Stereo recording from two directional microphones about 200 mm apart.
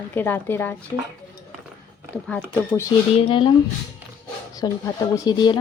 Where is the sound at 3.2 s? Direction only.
25° left (ahead or behind).